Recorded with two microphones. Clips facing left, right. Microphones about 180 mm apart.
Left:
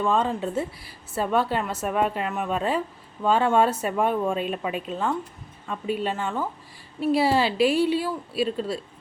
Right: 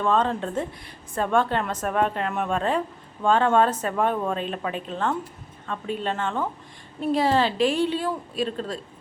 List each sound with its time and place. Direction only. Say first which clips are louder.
0.0 s a woman's voice: right 1 dB; 10° left (ahead or behind)